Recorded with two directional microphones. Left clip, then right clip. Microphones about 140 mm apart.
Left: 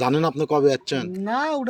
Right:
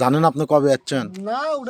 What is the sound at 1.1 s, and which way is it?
Speech, 35° right (ahead or behind).